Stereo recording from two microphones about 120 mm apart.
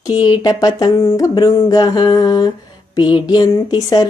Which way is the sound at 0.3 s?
35° left (ahead or behind).